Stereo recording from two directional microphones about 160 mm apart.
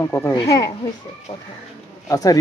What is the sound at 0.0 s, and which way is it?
Speech, 20° left (ahead or behind).